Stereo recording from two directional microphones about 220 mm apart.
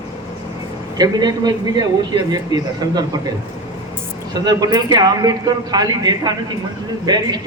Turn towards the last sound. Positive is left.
turn(degrees=-20)  # may be behind; listen again after turning